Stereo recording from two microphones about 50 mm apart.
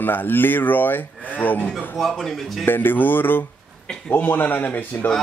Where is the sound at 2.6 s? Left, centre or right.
Left.